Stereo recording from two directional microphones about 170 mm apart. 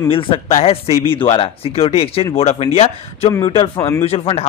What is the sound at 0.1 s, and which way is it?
Speech, 30° left (ahead or behind).